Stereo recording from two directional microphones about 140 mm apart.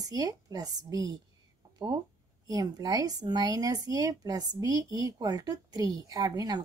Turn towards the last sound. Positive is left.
turn(degrees=-25)  # may be behind; listen again after turning